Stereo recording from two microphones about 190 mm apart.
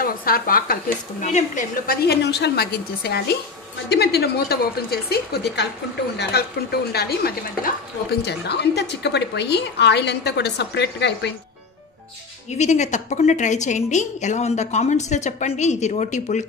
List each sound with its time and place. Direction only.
0.0 s a woman's voice: 50° left (ahead or behind); by 11.3 s 65° left (ahead or behind)
12.5 s a woman's voice: 40° left (ahead or behind)